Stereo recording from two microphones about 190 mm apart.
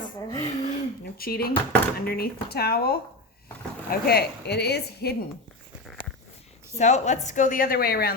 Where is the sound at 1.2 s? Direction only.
50° left (ahead or behind).